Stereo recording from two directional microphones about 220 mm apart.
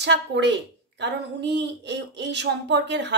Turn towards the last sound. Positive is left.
turn(degrees=-50)  # may be behind; listen again after turning